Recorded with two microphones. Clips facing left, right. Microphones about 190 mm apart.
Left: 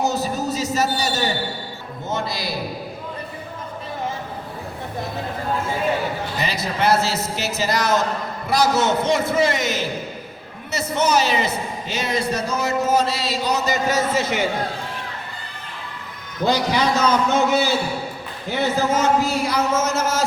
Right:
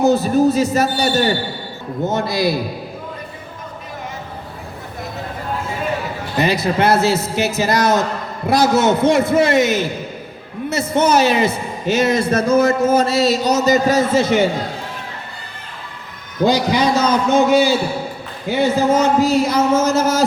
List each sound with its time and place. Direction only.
0.0 s a man's voice: 55° right (ahead or behind)
6.4 s a man's voice: 55° right (ahead or behind); by 14.4 s 30° right (ahead or behind)
16.4 s a man's voice: 15° right (ahead or behind)
19.3 s a sound: 25° right (ahead or behind)